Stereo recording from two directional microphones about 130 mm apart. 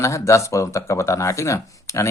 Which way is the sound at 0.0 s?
20° left (ahead or behind).